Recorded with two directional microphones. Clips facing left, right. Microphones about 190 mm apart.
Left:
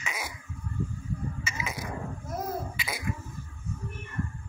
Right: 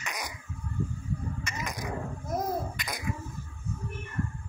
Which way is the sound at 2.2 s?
20° right (ahead or behind).